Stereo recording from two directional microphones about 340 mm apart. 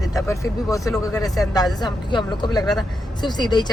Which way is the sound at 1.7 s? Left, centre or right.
Centre.